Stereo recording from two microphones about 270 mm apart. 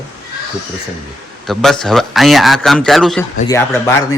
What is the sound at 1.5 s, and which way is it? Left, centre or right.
A man's voice, centre.